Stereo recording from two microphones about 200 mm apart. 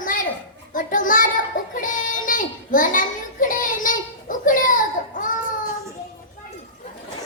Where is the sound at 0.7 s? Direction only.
40° left (ahead or behind).